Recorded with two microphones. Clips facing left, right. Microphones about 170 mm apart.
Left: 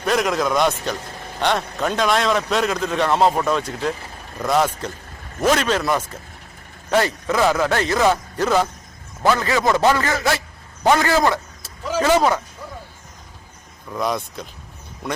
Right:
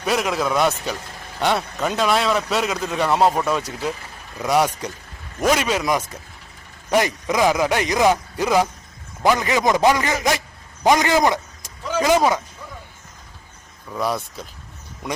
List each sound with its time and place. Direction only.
0.0 s a man's voice: 5° right (ahead or behind)
13.9 s a man's voice: 5° right (ahead or behind)